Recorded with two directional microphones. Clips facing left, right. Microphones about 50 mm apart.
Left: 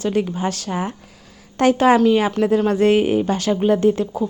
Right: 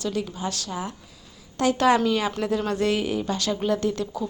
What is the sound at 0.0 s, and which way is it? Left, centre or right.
Speech, left.